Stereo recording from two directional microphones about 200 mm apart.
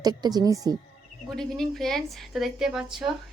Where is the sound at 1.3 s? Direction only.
Centre (ahead or behind).